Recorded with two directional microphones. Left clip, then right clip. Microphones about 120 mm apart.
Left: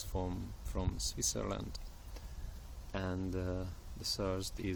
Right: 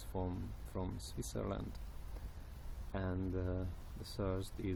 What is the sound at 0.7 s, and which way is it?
Speech, 15° left (ahead or behind).